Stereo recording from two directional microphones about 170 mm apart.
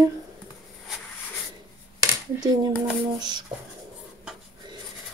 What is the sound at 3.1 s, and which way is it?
Speech, 25° right (ahead or behind).